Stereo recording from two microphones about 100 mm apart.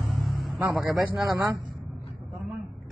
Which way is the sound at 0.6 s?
30° right (ahead or behind).